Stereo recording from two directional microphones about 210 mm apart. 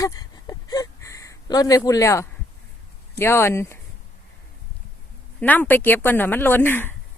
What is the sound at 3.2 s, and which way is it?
Speech, 10° left (ahead or behind).